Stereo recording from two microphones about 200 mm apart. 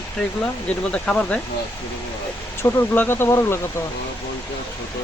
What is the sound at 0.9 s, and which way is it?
Speech, 5° left (ahead or behind).